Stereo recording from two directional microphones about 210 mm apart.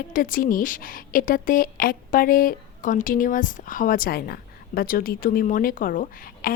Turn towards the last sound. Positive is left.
turn(degrees=45)  # may be behind; listen again after turning